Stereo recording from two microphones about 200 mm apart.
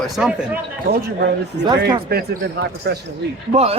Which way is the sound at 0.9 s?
55° right (ahead or behind).